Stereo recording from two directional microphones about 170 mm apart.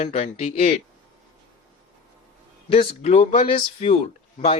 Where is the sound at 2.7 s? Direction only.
35° left (ahead or behind).